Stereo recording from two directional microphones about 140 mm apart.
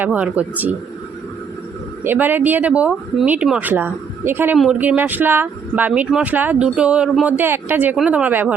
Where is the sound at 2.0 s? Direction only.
15° right (ahead or behind).